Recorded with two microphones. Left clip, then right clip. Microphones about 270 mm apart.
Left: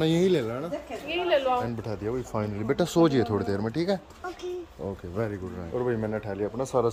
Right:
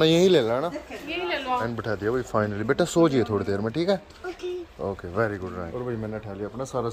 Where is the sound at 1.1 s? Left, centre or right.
Left.